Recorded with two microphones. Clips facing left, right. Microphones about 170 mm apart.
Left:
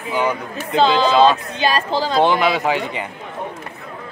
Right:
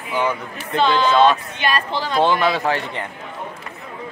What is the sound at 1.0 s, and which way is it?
Speech, 30° left (ahead or behind).